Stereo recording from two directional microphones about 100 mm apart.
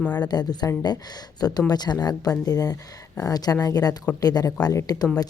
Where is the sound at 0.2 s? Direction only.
45° left (ahead or behind).